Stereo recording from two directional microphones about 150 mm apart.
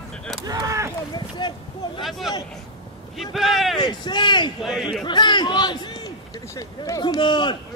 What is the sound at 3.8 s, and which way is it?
Speech, 30° left (ahead or behind).